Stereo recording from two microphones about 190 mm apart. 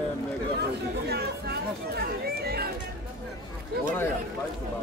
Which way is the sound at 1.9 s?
55° right (ahead or behind).